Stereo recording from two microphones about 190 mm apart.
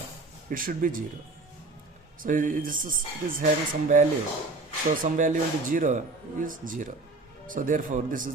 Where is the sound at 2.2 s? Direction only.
45° right (ahead or behind).